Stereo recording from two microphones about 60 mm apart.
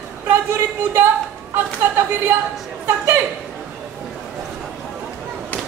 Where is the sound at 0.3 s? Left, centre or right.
Right.